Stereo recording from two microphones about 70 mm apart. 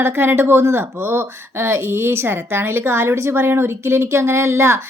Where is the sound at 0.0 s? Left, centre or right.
Right.